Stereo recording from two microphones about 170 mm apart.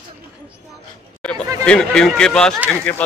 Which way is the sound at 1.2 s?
5° left (ahead or behind).